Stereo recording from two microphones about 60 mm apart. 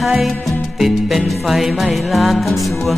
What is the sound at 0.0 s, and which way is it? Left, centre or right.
Music, centre.